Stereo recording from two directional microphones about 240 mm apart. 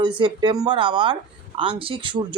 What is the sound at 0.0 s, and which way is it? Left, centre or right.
Speech, centre.